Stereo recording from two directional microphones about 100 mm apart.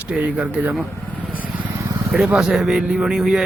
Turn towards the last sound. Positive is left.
turn(degrees=-5)  # may be behind; listen again after turning